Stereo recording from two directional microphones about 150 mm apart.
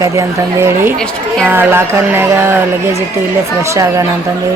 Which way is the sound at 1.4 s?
15° right (ahead or behind).